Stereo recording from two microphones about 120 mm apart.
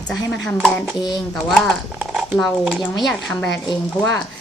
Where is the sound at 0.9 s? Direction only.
35° left (ahead or behind).